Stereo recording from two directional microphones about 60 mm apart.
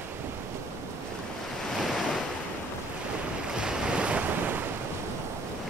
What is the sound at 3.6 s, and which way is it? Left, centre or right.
Waves, centre.